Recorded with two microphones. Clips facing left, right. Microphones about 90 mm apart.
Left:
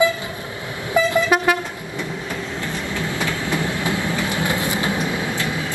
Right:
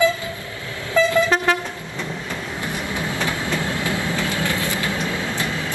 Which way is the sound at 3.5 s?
20° left (ahead or behind).